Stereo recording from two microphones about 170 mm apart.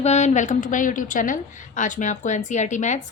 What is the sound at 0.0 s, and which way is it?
A woman's voice, 40° left (ahead or behind).